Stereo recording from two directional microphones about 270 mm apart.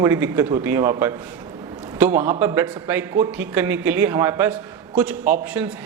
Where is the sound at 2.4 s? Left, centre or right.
Centre.